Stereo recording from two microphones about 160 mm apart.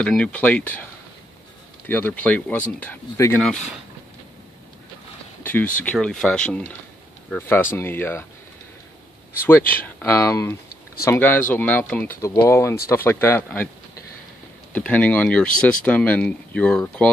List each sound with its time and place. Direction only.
0.0 s speech: 5° left (ahead or behind)
1.9 s speech: 10° left (ahead or behind)
5.4 s speech: 10° left (ahead or behind)
9.4 s speech: 10° left (ahead or behind)
14.7 s speech: 10° left (ahead or behind)